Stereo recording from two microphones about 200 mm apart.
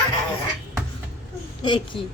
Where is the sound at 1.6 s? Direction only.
25° left (ahead or behind).